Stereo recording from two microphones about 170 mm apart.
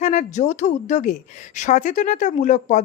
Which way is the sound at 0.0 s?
45° left (ahead or behind).